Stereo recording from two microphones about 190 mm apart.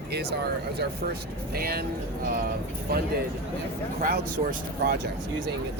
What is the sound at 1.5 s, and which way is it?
Speech, 55° right (ahead or behind).